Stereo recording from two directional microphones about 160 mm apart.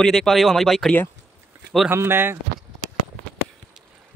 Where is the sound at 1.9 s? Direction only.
15° right (ahead or behind).